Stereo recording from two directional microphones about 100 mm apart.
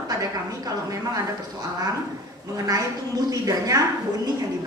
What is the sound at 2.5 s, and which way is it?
A woman's voice, 40° right (ahead or behind).